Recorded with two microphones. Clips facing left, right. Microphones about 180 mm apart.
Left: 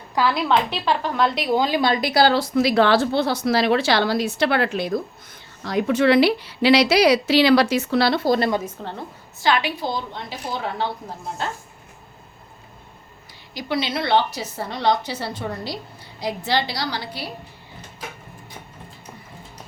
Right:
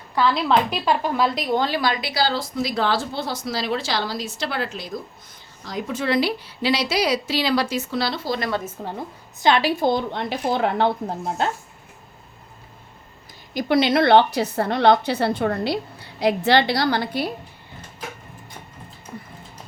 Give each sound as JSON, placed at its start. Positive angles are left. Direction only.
{"t": 0.2, "sound": "speech", "side_deg": 5}
{"t": 2.0, "sound": "a woman's voice", "side_deg": 50}
{"t": 8.6, "sound": "a woman's voice", "side_deg": -10}
{"t": 9.8, "sound": "a woman's voice", "side_deg": -60}
{"t": 13.5, "sound": "a woman's voice", "side_deg": -50}